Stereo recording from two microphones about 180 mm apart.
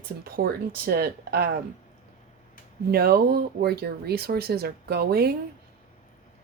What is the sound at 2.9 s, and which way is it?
Speech, 60° right (ahead or behind).